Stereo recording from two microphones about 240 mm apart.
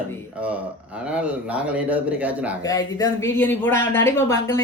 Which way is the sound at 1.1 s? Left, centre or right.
Centre.